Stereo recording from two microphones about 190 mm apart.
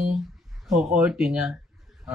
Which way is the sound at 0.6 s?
5° right (ahead or behind).